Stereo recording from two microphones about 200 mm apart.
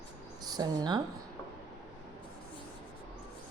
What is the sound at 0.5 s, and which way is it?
Speech, 20° right (ahead or behind).